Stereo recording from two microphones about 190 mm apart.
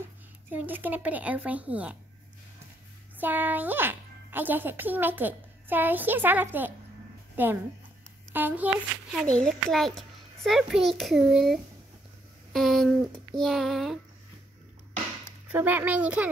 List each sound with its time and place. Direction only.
0.5 s speech: 10° right (ahead or behind)
3.2 s speech: 10° right (ahead or behind)
9.1 s a child's voice: 5° left (ahead or behind)
15.4 s speech: 10° right (ahead or behind)